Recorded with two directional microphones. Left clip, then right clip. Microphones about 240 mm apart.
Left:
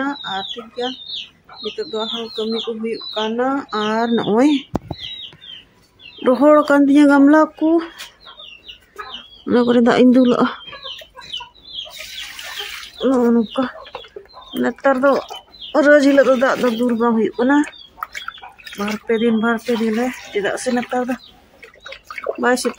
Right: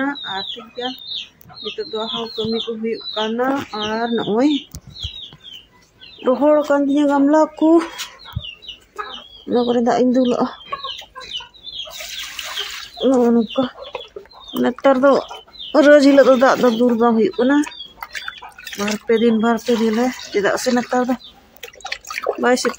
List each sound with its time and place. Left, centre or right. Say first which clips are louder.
0.0 s chicken: even; centre
1.6 s speech: left 1 dB; centre
3.7 s speech: left 3 dB; left
4.0 s speech: left 1 dB; centre
6.2 s speech: left 2 dB; left
7.5 s speech: right 3 dB; centre
9.5 s speech: left 2 dB; left
13.1 s speech: right 1 dB; centre
18.9 s speech: right 2 dB; centre
22.4 s speech: even; centre